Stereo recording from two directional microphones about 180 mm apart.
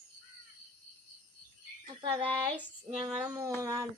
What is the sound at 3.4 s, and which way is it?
Speech, 20° right (ahead or behind).